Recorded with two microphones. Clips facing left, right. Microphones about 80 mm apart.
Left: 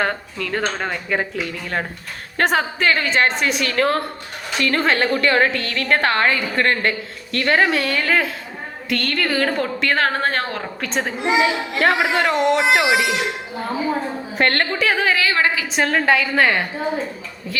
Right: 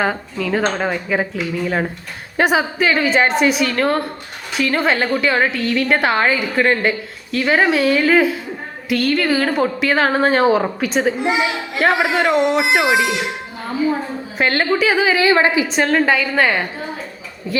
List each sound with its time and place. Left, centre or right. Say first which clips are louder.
0.0 s a woman's voice: right 3 dB; centre
15.1 s a woman's voice: right 5 dB; right
15.6 s a woman's voice: right 2 dB; centre